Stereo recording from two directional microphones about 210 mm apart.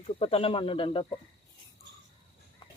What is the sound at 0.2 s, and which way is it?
Speech, 25° left (ahead or behind).